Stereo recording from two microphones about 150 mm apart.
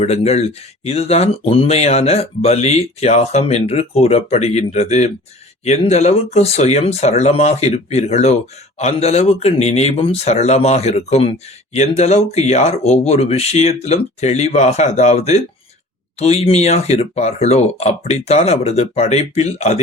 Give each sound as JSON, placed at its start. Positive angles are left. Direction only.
{"t": 0.0, "sound": "speech", "side_deg": 45}